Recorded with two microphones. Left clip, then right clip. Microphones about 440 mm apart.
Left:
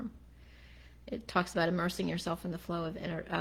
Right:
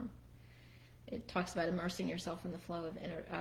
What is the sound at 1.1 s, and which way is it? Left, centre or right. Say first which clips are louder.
Speech: left 7 dB; left.